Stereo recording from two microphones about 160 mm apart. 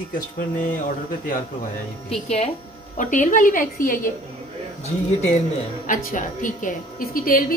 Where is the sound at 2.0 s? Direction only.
40° left (ahead or behind).